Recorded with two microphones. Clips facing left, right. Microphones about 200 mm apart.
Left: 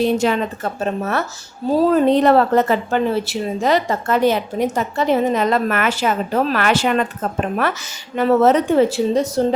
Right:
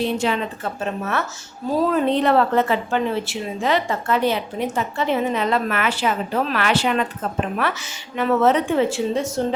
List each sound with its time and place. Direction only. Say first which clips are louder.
0.0 s a woman's voice: left 5 dB; 45° left (ahead or behind)